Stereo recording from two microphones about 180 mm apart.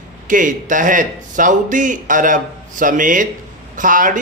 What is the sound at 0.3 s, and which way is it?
A man's voice, 45° right (ahead or behind).